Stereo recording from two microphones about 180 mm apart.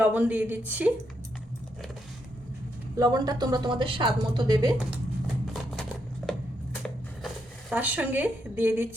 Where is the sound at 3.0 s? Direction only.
20° right (ahead or behind).